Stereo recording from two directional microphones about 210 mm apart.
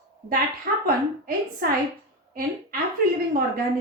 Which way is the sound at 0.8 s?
45° right (ahead or behind).